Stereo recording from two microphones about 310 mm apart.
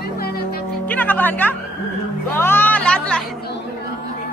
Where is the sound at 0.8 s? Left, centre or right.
Centre.